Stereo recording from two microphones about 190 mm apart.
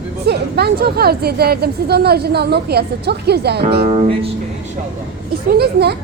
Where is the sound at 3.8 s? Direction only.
30° right (ahead or behind).